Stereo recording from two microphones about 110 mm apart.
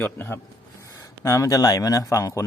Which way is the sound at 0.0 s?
20° left (ahead or behind).